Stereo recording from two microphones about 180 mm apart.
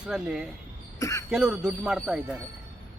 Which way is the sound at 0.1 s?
5° right (ahead or behind).